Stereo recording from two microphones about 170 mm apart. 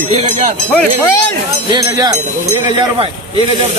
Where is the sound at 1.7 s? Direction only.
25° right (ahead or behind).